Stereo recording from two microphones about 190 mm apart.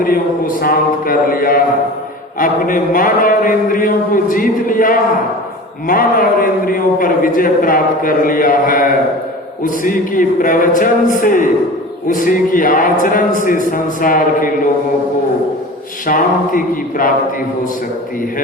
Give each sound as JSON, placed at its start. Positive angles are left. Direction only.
{"t": 0.0, "sound": "a man's voice", "side_deg": 50}
{"t": 16.0, "sound": "a man's voice", "side_deg": 45}